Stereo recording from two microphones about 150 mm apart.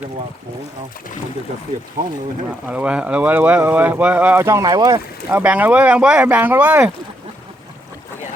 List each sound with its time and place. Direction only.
2.0 s speech: 30° right (ahead or behind)
2.6 s speech: 5° right (ahead or behind); by 4.9 s 25° right (ahead or behind)
5.3 s speech: 10° right (ahead or behind)